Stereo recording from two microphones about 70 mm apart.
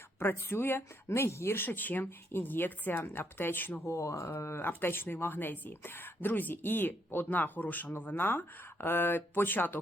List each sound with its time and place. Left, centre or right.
0.2 s a woman's voice: left
3.8 s a woman's voice: left